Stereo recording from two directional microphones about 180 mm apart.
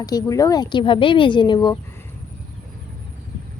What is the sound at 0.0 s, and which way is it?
Speech, 20° left (ahead or behind).